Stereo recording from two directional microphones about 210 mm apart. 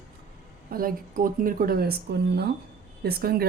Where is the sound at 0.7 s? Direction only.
40° right (ahead or behind).